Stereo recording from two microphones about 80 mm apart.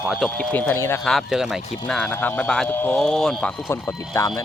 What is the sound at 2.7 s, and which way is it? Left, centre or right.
Speech, left.